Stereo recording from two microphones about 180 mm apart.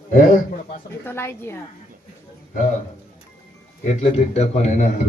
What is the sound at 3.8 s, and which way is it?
A man's voice, 35° left (ahead or behind).